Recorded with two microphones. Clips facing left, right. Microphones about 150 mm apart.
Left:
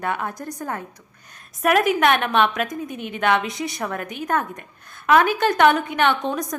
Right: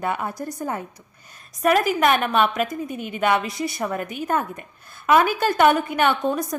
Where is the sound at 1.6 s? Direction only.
Centre (ahead or behind).